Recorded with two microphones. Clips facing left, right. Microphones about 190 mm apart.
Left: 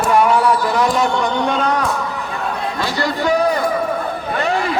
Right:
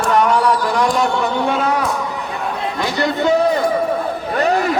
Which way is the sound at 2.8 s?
20° right (ahead or behind).